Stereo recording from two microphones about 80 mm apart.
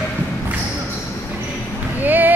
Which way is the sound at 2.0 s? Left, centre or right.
Right.